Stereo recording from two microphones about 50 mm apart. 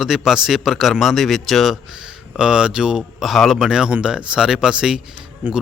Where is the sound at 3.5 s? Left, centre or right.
Centre.